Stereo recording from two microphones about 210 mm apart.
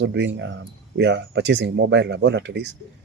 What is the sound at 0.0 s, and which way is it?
Speech, 60° right (ahead or behind).